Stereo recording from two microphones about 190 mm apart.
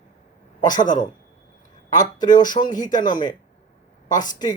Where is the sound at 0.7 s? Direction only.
45° left (ahead or behind).